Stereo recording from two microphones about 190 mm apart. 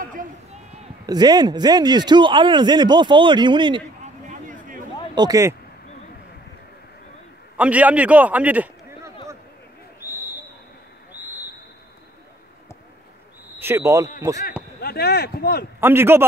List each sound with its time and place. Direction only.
0.0 s speech: 45° right (ahead or behind)
1.0 s speech: 20° right (ahead or behind)
4.0 s a sound: 40° right (ahead or behind)
5.1 s speech: 20° right (ahead or behind)
7.5 s a man's voice: 10° right (ahead or behind)
9.9 s a sound: 10° right (ahead or behind)
11.1 s vehicle: 10° right (ahead or behind)
13.6 s speech: 15° right (ahead or behind)
14.8 s speech: 55° left (ahead or behind)
15.8 s speech: 10° right (ahead or behind)